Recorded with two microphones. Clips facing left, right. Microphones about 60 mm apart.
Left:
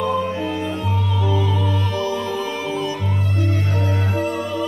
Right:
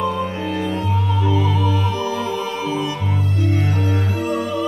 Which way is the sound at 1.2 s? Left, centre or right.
Right.